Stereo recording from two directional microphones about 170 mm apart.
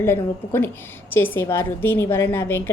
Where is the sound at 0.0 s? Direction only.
10° left (ahead or behind).